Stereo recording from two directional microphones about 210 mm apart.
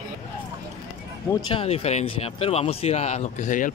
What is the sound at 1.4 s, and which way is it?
A man's voice, 25° left (ahead or behind).